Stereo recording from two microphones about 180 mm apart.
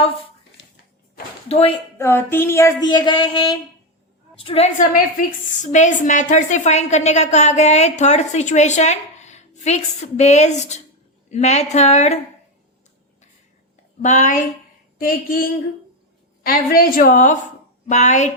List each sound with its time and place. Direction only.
0.6 s a sound: 75° left (ahead or behind)
1.5 s speech: 35° left (ahead or behind)
2.0 s a woman's voice: 15° left (ahead or behind); by 12.2 s 40° left (ahead or behind)
14.0 s a woman's voice: 40° left (ahead or behind)
14.9 s a woman's voice: 55° left (ahead or behind)